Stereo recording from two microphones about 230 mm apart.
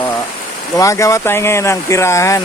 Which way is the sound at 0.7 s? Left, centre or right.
Centre.